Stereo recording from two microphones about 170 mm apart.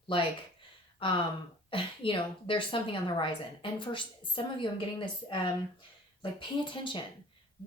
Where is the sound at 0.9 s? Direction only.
30° left (ahead or behind).